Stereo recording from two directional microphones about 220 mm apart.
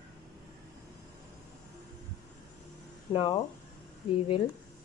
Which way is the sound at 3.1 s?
20° left (ahead or behind).